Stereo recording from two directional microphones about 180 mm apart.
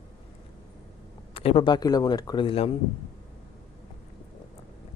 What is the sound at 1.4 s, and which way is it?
A man's voice, 30° left (ahead or behind).